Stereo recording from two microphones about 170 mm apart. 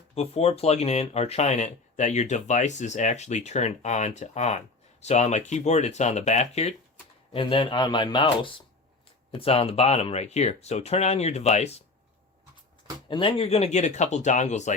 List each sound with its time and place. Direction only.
0.1 s speech: 35° left (ahead or behind)
7.3 s speech: 30° left (ahead or behind)
13.1 s speech: 30° left (ahead or behind)